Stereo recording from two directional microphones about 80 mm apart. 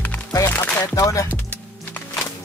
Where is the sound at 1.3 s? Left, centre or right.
Centre.